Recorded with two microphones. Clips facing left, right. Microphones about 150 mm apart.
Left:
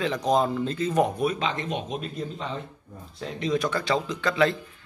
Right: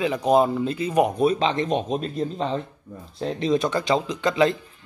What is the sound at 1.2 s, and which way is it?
Speech, 30° right (ahead or behind).